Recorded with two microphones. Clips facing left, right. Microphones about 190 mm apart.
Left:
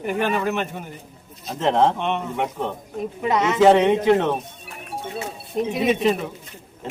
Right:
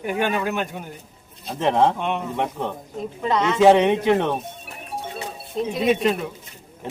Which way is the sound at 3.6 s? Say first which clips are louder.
Even; 10° right (ahead or behind).